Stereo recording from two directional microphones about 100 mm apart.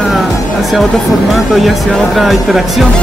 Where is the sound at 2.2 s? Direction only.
Centre (ahead or behind).